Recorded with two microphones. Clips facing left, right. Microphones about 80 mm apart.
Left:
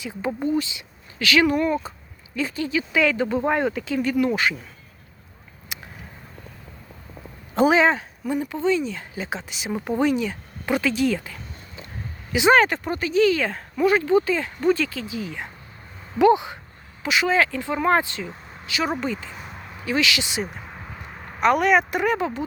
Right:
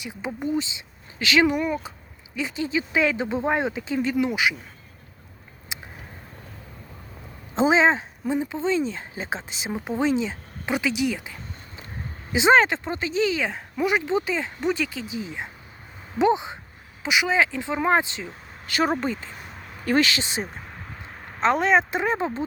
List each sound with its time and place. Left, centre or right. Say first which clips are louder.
0.0 s speech: left 4 dB; centre
1.5 s speech: left 3 dB; centre
5.7 s vehicle: even; right
7.5 s speech: left 1 dB; right
18.6 s speech: right 2 dB; right
18.9 s speech: even; right
19.8 s speech: right 2 dB; right